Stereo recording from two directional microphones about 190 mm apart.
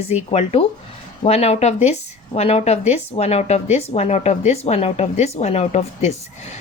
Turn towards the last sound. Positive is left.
turn(degrees=35)  # may be behind; listen again after turning